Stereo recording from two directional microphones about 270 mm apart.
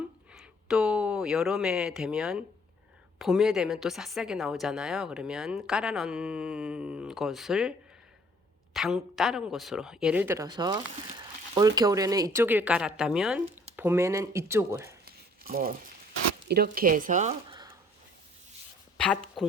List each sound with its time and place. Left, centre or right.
0.3 s a woman's voice: centre
8.7 s a woman's voice: centre
15.4 s speech: right
18.9 s a woman's voice: centre